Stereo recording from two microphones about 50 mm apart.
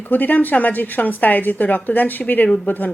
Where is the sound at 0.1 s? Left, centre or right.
Left.